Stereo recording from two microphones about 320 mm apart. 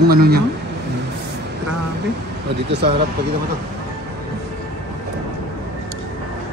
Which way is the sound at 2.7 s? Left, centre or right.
Right.